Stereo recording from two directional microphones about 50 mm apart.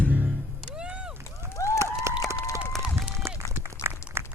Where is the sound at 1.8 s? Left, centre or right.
Right.